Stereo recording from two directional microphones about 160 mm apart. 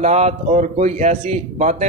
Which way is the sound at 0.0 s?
45° right (ahead or behind).